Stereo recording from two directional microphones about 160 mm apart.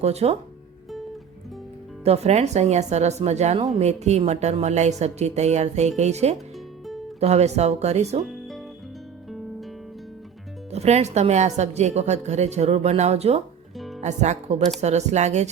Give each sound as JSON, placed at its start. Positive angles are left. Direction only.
{"t": 0.0, "sound": "speech", "side_deg": -40}
{"t": 2.0, "sound": "a woman's voice", "side_deg": -40}
{"t": 8.2, "sound": "music", "side_deg": 0}
{"t": 10.7, "sound": "a woman's voice", "side_deg": -45}